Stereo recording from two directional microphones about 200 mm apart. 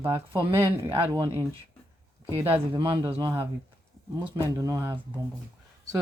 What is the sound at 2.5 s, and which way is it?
Speech, 25° right (ahead or behind).